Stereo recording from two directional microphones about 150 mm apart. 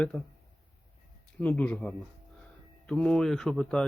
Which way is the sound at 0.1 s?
10° left (ahead or behind).